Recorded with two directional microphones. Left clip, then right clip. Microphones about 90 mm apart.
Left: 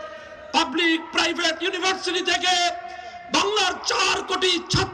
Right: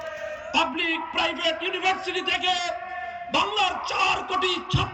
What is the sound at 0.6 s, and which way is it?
A man's voice, 45° left (ahead or behind).